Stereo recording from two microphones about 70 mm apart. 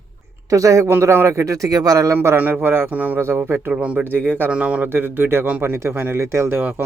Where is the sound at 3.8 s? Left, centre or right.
Centre.